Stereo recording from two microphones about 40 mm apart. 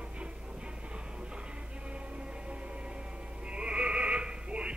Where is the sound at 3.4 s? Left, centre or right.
Right.